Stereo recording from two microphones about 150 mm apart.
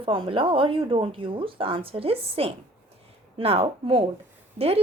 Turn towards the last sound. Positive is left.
turn(degrees=-40)  # may be behind; listen again after turning